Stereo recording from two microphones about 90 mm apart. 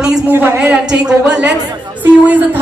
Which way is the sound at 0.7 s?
10° right (ahead or behind).